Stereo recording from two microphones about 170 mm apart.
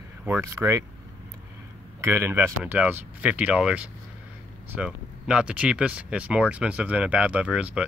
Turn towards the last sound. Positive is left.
turn(degrees=-5)  # may be behind; listen again after turning